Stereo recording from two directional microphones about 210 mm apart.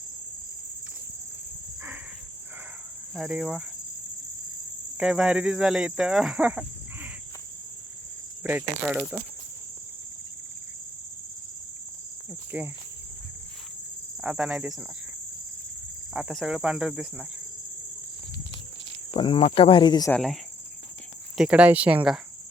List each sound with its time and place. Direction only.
3.2 s speech: centre (ahead or behind)
4.9 s speech: 5° right (ahead or behind)
8.4 s speech: 5° right (ahead or behind)
12.5 s cricket: 10° right (ahead or behind)
14.2 s speech: 5° right (ahead or behind)
16.1 s speech: centre (ahead or behind)
19.1 s speech: 25° left (ahead or behind)
20.1 s speech: centre (ahead or behind)